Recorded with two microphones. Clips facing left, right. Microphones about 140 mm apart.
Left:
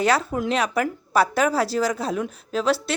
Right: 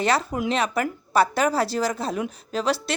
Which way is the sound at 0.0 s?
5° left (ahead or behind).